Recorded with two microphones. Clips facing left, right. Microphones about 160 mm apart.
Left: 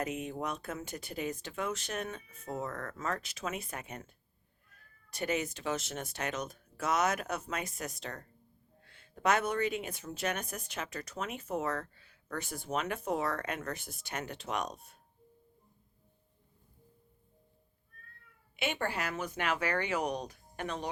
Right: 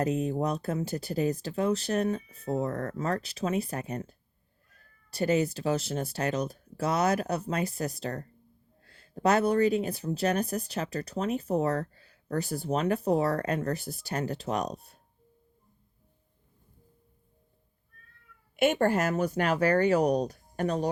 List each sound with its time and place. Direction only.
0.0 s speech: 35° right (ahead or behind)
5.1 s speech: 35° right (ahead or behind)
18.5 s speech: 45° right (ahead or behind)